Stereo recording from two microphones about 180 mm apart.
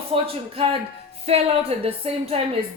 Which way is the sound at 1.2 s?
35° right (ahead or behind).